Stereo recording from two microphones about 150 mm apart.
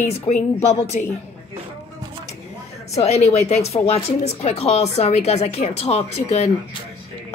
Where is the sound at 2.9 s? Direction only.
45° left (ahead or behind).